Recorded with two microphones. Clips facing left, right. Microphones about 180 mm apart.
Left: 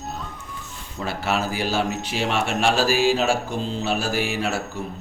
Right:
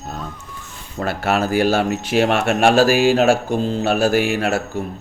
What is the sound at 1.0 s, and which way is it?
Speech, 55° right (ahead or behind).